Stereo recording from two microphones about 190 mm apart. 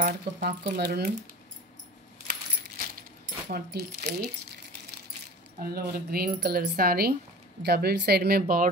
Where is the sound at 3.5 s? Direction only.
55° right (ahead or behind).